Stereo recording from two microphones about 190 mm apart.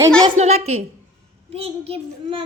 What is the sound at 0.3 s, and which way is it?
A child's voice, 35° right (ahead or behind).